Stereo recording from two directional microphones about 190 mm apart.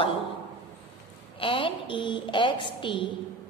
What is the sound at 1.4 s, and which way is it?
A woman's voice, 25° left (ahead or behind).